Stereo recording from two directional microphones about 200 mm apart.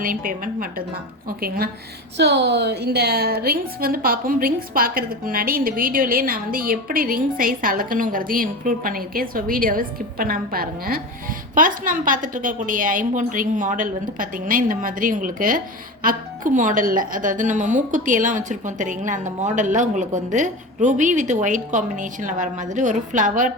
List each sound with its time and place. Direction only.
0.0 s a woman's voice: 45° right (ahead or behind)